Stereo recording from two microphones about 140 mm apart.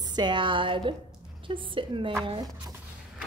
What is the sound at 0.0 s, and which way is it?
A woman's voice, 30° right (ahead or behind).